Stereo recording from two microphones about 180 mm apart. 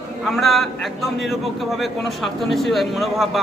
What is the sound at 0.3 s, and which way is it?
Speech, centre (ahead or behind).